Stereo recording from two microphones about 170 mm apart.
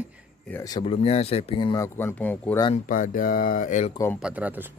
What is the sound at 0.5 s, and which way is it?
Speech, 20° left (ahead or behind).